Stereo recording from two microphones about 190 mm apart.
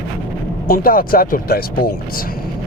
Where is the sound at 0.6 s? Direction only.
50° left (ahead or behind).